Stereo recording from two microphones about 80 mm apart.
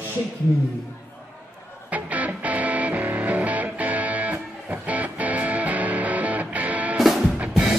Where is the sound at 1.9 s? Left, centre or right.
Centre.